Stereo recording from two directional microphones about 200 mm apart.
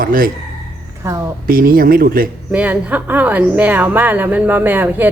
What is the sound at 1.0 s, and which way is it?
Speech, 15° right (ahead or behind).